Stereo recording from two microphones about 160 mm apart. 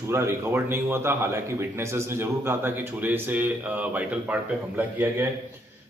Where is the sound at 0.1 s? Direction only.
15° right (ahead or behind).